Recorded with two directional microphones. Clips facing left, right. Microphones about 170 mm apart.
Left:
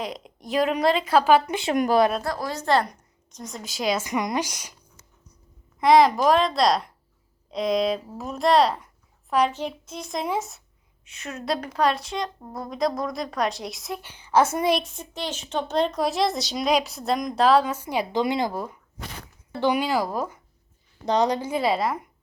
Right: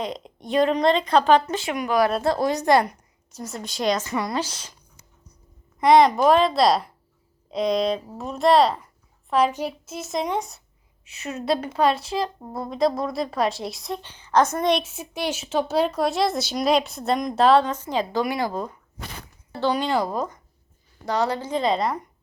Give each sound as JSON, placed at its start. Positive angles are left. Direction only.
{"t": 0.0, "sound": "a woman's voice", "side_deg": 0}
{"t": 2.2, "sound": "a woman's voice", "side_deg": -25}
{"t": 3.3, "sound": "a woman's voice", "side_deg": -5}
{"t": 4.0, "sound": "a woman's voice", "side_deg": 15}
{"t": 5.8, "sound": "a woman's voice", "side_deg": 0}